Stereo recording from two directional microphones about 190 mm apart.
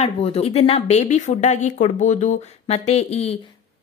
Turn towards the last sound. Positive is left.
turn(degrees=35)  # may be behind; listen again after turning